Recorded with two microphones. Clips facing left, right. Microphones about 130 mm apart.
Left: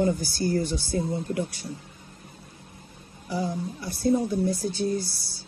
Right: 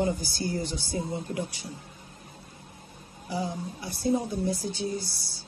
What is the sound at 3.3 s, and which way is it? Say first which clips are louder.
Speech: left 3 dB; 50° left (ahead or behind).